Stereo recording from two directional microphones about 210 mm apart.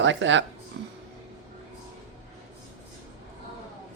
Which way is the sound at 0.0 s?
60° right (ahead or behind).